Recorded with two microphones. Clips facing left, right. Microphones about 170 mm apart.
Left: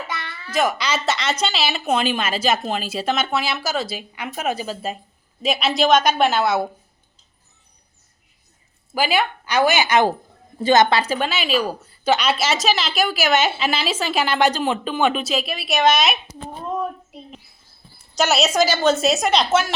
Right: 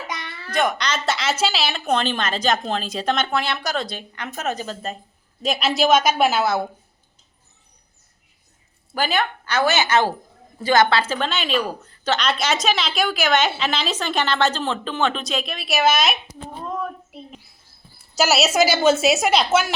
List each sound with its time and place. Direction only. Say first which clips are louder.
0.1 s babbling: left 1 dB; 15° right (ahead or behind)
0.5 s a woman's voice: left 1 dB; 5° left (ahead or behind)
9.0 s a woman's voice: left 2 dB; 10° left (ahead or behind)
17.9 s a woman's voice: even; 5° right (ahead or behind)